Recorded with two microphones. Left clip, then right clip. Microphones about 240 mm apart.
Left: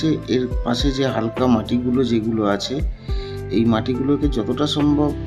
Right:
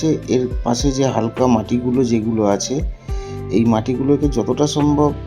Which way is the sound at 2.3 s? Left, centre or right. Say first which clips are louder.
Right 3 dB; centre.